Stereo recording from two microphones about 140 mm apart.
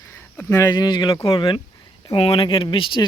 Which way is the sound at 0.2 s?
15° left (ahead or behind).